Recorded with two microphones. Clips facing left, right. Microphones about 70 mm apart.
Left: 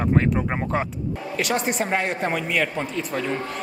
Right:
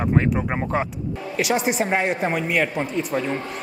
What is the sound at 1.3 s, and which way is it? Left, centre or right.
Speech, centre.